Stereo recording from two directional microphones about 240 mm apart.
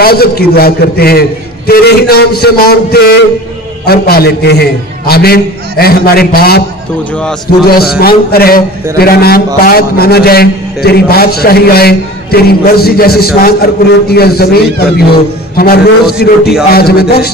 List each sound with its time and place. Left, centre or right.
0.0 s a man's voice: left
8.0 s a man's voice: left